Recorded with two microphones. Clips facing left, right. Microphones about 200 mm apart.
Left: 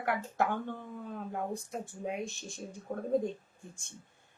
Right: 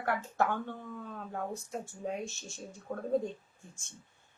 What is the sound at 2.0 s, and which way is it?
Speech, 15° left (ahead or behind).